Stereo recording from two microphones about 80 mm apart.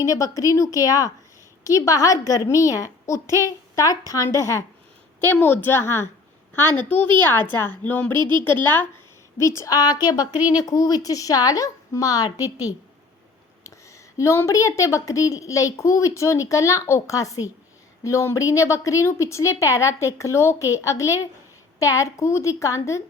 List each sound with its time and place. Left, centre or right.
0.0 s a woman's voice: left
5.2 s a woman's voice: left
8.1 s speech: right
9.4 s a woman's voice: left
13.7 s a sound: left
14.3 s a woman's voice: left